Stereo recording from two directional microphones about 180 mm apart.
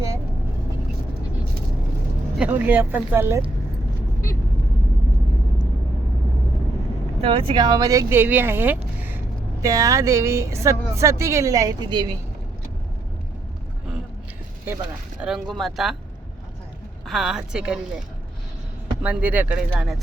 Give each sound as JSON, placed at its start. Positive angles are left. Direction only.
{"t": 2.3, "sound": "speech", "side_deg": -10}
{"t": 7.2, "sound": "speech", "side_deg": -30}
{"t": 15.2, "sound": "speech", "side_deg": 0}
{"t": 17.1, "sound": "speech", "side_deg": 0}
{"t": 19.0, "sound": "speech", "side_deg": -10}